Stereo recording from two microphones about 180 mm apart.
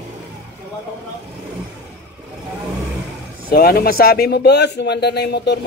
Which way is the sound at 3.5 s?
60° left (ahead or behind).